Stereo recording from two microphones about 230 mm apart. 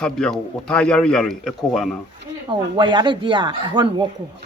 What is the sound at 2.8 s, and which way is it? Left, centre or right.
Speech, centre.